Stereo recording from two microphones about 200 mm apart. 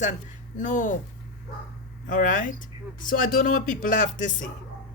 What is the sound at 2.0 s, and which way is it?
Speech, 40° left (ahead or behind).